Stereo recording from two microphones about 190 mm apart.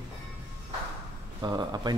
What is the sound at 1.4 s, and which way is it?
Speech, 20° right (ahead or behind).